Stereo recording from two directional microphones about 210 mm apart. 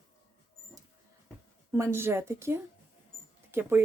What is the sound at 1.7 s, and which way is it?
Speech, 10° right (ahead or behind).